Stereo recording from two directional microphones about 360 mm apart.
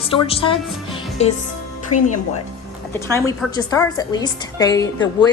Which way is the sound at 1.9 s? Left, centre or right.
Left.